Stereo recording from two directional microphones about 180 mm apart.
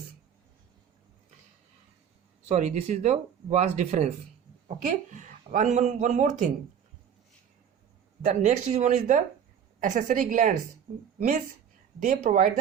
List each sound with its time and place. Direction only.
2.5 s speech: 40° right (ahead or behind)
8.2 s speech: 40° right (ahead or behind)